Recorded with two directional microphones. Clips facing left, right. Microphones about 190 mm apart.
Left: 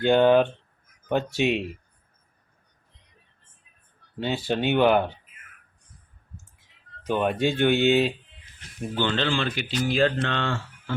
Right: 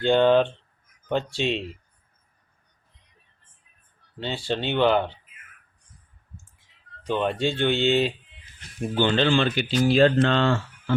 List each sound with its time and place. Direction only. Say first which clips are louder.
0.0 s speech: even; 10° left (ahead or behind)
4.4 s speech: left 1 dB; 10° left (ahead or behind)
7.0 s speech: left 1 dB; 10° left (ahead or behind)
9.0 s speech: right 5 dB; 15° right (ahead or behind); by 10.5 s 35° right (ahead or behind)